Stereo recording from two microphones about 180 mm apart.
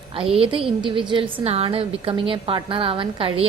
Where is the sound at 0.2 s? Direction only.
30° right (ahead or behind).